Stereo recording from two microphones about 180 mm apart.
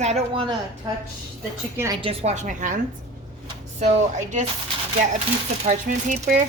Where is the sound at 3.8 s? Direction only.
40° right (ahead or behind).